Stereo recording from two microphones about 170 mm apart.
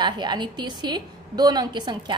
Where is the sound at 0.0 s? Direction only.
25° right (ahead or behind).